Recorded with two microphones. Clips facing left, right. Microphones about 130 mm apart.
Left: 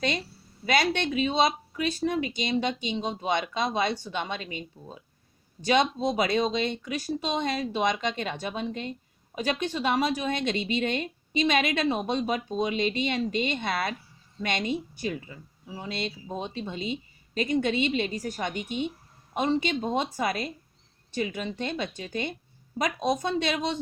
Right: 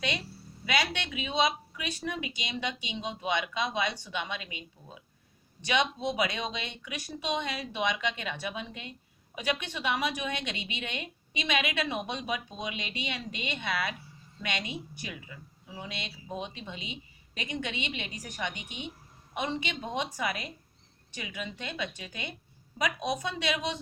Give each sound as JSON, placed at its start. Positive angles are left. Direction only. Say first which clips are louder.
{"t": 0.6, "sound": "speech", "louder": "left 6 dB", "side_deg": 40}